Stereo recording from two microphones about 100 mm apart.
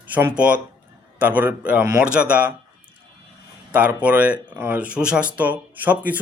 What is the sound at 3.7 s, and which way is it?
Speech, 15° right (ahead or behind).